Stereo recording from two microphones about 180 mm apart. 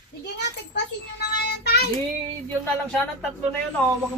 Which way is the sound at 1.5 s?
70° left (ahead or behind).